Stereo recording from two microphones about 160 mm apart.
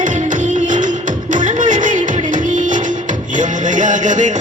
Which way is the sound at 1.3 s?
55° right (ahead or behind).